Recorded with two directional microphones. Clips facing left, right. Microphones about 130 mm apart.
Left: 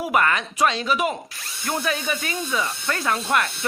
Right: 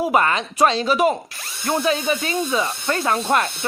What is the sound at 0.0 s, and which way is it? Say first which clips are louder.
Speech: right 3 dB; 25° right (ahead or behind).